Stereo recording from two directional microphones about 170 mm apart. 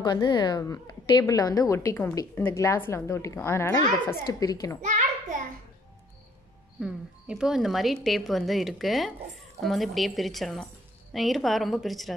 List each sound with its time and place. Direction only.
0.0 s a woman's voice: 25° left (ahead or behind)
6.8 s a woman's voice: 5° right (ahead or behind)